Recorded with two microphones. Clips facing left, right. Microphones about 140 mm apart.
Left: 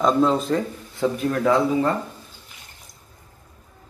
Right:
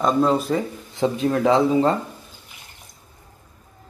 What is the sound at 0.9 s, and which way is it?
Speech, 25° right (ahead or behind).